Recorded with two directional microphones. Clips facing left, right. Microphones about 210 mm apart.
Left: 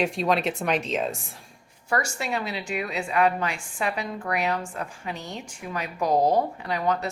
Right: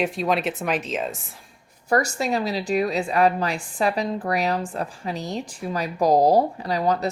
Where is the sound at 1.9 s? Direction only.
40° right (ahead or behind).